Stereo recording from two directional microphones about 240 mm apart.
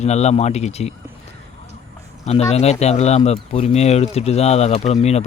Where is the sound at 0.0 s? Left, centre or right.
Left.